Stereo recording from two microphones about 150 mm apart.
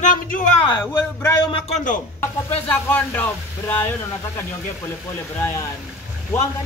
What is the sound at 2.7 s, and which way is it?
Speech, 10° left (ahead or behind).